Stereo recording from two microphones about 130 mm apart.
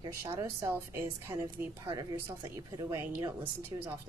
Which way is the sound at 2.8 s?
25° right (ahead or behind).